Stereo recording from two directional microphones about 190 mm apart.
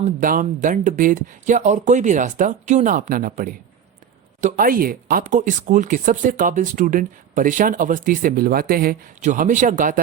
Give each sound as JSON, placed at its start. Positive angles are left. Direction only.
{"t": 0.2, "sound": "speech", "side_deg": -45}